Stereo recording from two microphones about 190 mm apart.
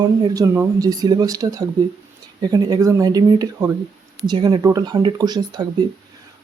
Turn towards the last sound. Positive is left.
turn(degrees=-20)  # may be behind; listen again after turning